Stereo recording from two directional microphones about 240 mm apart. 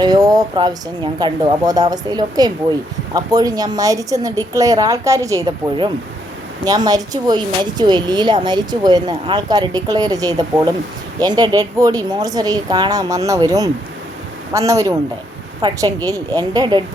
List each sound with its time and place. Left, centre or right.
0.0 s speech: centre